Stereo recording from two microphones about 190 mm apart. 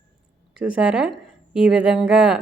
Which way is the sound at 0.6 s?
5° right (ahead or behind).